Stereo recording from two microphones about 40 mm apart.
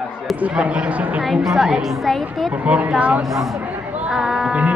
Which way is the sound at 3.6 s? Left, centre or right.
Right.